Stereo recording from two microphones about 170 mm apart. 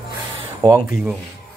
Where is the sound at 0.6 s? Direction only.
15° right (ahead or behind).